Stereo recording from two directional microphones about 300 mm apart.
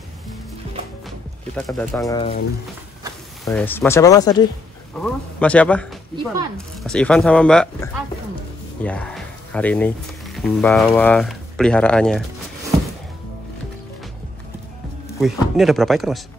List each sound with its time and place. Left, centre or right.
1.7 s speech: centre
2.0 s speech: centre
3.4 s speech: centre
15.0 s speech: centre